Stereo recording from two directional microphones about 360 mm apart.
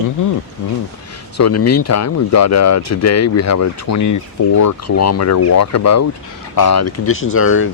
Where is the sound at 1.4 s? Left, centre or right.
Left.